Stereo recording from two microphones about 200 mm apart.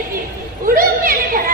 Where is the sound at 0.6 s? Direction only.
45° right (ahead or behind).